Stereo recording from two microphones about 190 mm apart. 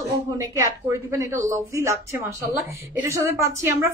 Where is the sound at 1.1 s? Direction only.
15° right (ahead or behind).